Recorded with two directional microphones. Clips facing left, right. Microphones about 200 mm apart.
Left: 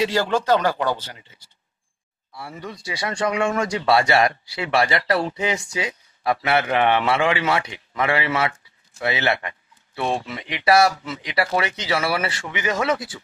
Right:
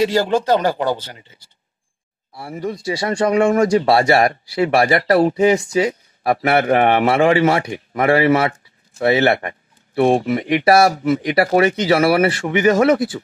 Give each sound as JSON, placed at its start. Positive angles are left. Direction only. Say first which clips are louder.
{"t": 0.0, "sound": "speech", "louder": "right 5 dB", "side_deg": -40}
{"t": 2.3, "sound": "speech", "louder": "right 9 dB", "side_deg": -25}
{"t": 4.6, "sound": "speech", "louder": "right 5 dB", "side_deg": -50}